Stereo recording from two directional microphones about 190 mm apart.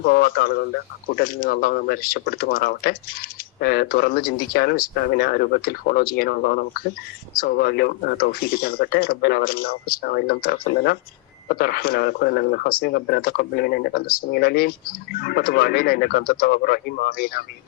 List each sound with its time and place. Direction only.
0.0 s speech: 50° left (ahead or behind)